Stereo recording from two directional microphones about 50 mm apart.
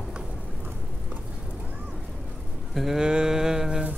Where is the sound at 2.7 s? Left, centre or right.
Centre.